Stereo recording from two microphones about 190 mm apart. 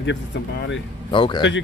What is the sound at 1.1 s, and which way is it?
Speech, 25° left (ahead or behind).